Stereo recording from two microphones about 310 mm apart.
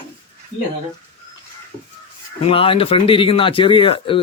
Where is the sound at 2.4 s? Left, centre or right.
Centre.